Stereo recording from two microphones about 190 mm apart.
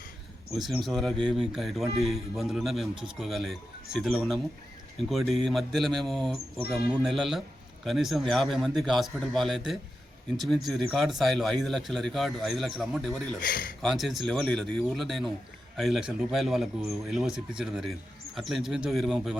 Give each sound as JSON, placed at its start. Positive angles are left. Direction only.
{"t": 0.6, "sound": "speech", "side_deg": 0}
{"t": 13.4, "sound": "speech", "side_deg": 50}
{"t": 13.8, "sound": "speech", "side_deg": 0}